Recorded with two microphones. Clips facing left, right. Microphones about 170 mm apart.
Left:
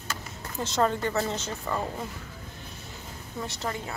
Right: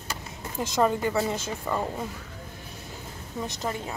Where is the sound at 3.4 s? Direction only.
20° right (ahead or behind).